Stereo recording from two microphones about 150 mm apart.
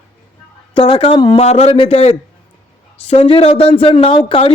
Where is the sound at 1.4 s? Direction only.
45° left (ahead or behind).